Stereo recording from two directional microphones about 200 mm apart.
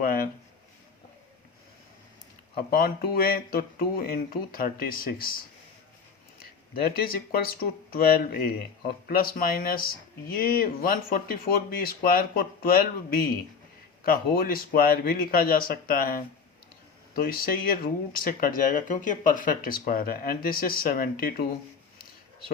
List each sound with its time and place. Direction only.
0.0 s a sound: 45° left (ahead or behind)
2.6 s speech: 50° left (ahead or behind)
6.4 s speech: 50° left (ahead or behind)